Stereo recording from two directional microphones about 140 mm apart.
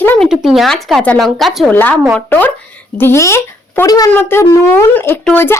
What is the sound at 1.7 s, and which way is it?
A woman's voice, 15° left (ahead or behind).